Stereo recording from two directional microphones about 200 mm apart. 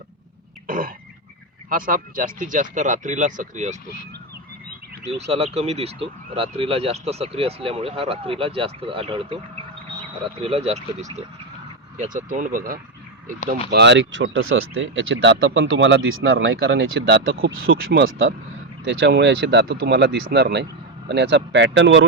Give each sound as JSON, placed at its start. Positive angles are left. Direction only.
{"t": 0.7, "sound": "throat clearing", "side_deg": -45}
{"t": 1.7, "sound": "speech", "side_deg": -45}
{"t": 5.3, "sound": "speech", "side_deg": -30}
{"t": 10.4, "sound": "speech", "side_deg": -30}
{"t": 13.7, "sound": "speech", "side_deg": -60}
{"t": 18.9, "sound": "speech", "side_deg": -70}